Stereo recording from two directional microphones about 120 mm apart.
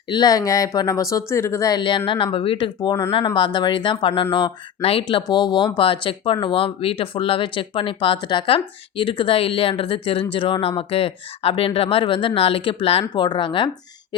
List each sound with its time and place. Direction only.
0.1 s speech: 35° left (ahead or behind); by 13.2 s 55° left (ahead or behind)
13.2 s speech: 40° left (ahead or behind)